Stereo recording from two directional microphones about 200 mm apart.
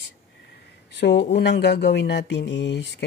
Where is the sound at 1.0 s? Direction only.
55° left (ahead or behind).